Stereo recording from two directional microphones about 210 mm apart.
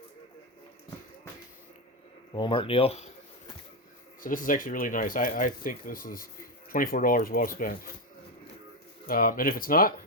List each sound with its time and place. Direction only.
2.3 s speech: 25° left (ahead or behind)
4.2 s speech: 40° left (ahead or behind)
9.0 s speech: 45° left (ahead or behind)